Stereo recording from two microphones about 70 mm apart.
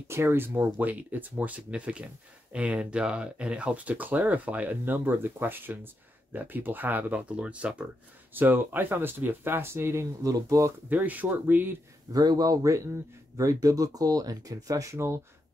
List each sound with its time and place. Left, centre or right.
0.1 s speech: right
0.7 s speech: right
8.3 s speech: right
10.2 s speech: right
10.9 s speech: right
12.1 s speech: right